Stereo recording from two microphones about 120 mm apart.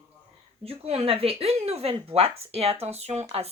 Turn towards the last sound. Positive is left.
turn(degrees=-55)  # may be behind; listen again after turning